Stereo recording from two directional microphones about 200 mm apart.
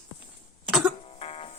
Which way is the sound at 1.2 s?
30° left (ahead or behind).